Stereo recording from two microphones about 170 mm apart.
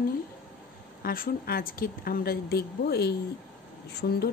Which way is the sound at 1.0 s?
60° left (ahead or behind).